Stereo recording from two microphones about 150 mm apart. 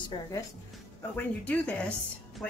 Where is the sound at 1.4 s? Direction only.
10° left (ahead or behind).